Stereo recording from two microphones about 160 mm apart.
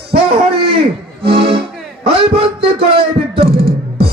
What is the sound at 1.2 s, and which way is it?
Speech, 35° right (ahead or behind).